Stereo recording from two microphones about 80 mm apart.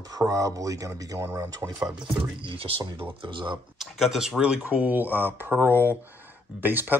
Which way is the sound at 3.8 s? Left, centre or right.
Centre.